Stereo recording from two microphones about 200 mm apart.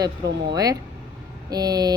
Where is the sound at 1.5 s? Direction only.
20° right (ahead or behind).